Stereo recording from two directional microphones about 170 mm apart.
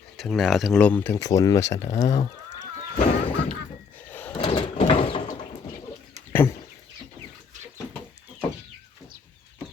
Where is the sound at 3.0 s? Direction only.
35° left (ahead or behind).